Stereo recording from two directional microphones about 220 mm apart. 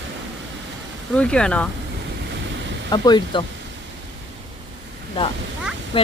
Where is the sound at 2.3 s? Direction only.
55° right (ahead or behind).